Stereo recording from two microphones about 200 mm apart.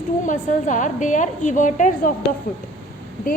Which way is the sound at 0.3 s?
40° left (ahead or behind).